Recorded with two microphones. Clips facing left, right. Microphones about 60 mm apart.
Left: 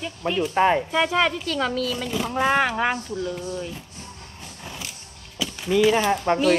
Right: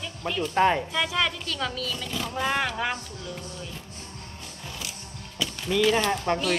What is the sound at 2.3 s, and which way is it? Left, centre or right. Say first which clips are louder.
Speech: left 6 dB; left.